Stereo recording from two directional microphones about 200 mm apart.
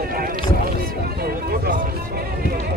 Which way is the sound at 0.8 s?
50° right (ahead or behind).